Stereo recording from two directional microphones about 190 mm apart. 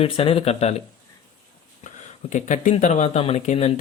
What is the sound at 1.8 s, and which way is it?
Speech, 40° left (ahead or behind).